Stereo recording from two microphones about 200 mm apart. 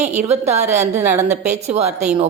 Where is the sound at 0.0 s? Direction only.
35° right (ahead or behind).